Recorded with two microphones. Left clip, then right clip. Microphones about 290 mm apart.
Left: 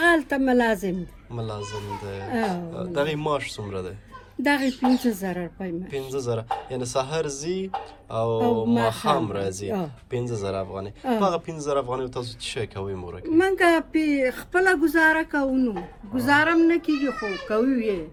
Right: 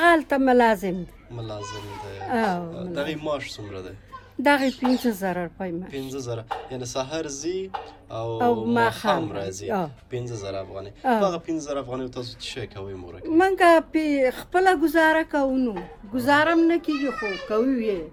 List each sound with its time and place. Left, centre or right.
0.0 s speech: centre
1.4 s speech: centre
4.4 s speech: centre
5.9 s speech: centre
13.2 s a woman's voice: right